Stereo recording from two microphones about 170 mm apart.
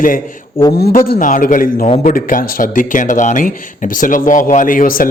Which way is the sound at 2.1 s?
55° left (ahead or behind).